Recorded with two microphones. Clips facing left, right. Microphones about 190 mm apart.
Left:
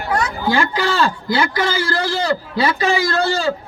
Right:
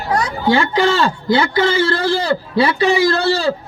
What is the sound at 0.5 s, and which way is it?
A man's voice, 25° right (ahead or behind).